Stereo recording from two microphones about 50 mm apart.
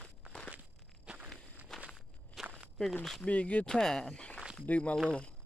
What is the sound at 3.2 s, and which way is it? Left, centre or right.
Speech, left.